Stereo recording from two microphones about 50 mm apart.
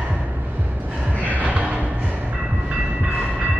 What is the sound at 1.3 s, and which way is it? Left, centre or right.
Music, right.